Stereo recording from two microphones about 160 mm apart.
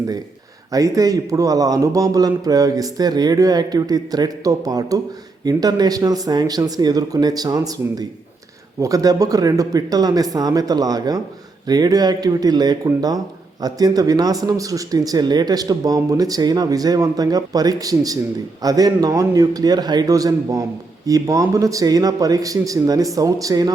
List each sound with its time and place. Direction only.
0.7 s speech: 20° right (ahead or behind)